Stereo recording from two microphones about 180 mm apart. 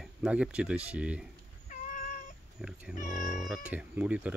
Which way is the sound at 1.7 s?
45° left (ahead or behind).